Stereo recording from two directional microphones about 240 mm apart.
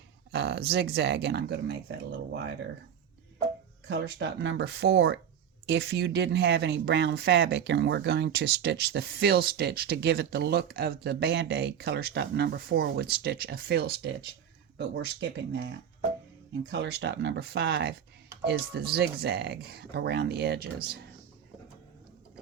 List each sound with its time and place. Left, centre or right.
0.3 s speech: right
3.8 s speech: right
16.6 s speech: right